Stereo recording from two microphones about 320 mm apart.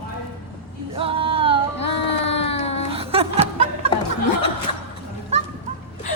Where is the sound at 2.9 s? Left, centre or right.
Centre.